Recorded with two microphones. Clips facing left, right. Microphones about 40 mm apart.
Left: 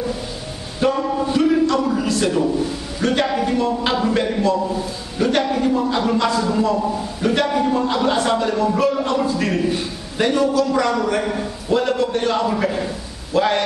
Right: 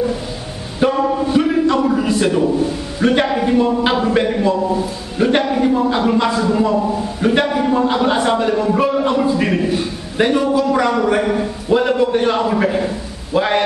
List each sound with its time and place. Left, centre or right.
0.7 s a sound: centre
3.0 s a man's voice: centre
9.7 s a man's voice: centre
10.2 s a man's voice: centre